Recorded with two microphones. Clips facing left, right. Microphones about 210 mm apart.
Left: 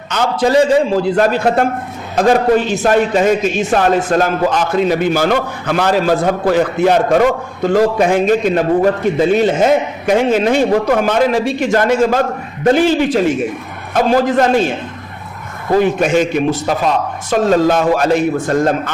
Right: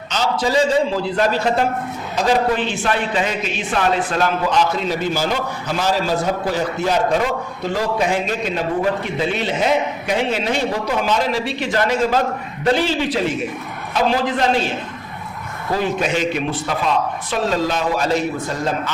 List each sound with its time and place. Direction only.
0.1 s a man's voice: 55° left (ahead or behind)
15.7 s a man's voice: 50° left (ahead or behind)